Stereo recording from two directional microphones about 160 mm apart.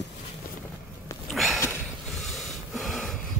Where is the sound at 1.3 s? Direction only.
Centre (ahead or behind).